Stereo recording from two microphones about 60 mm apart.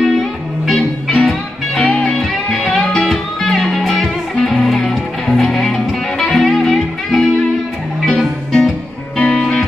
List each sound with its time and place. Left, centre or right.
0.0 s music: centre